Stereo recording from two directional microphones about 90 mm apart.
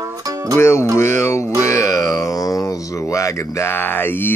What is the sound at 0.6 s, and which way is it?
Speech, 30° left (ahead or behind).